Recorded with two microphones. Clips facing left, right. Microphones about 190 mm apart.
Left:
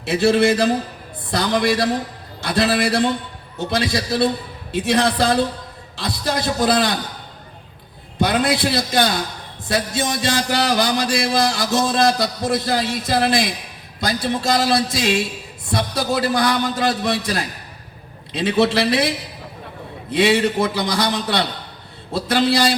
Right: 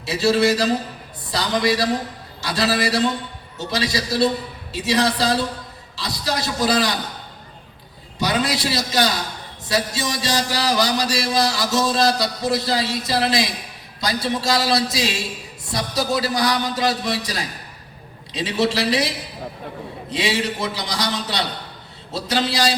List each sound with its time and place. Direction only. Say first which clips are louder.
0.0 s a man's voice: left 2 dB; 55° left (ahead or behind)
8.2 s a man's voice: left 4 dB; 55° left (ahead or behind)